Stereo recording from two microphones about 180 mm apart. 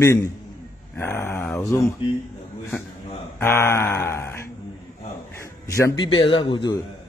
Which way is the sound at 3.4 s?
15° left (ahead or behind).